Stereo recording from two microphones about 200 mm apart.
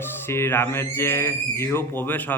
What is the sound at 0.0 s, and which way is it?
A man's voice, 10° left (ahead or behind).